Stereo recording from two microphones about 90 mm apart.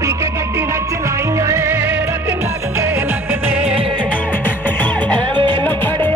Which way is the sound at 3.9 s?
15° left (ahead or behind).